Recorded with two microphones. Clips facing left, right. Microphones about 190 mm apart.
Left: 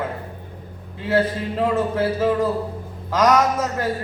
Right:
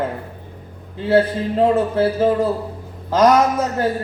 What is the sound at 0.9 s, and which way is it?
A man's voice, 30° right (ahead or behind).